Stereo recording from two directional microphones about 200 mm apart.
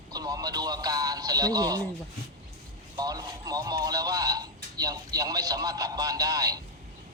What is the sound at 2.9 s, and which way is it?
Speech, 20° right (ahead or behind).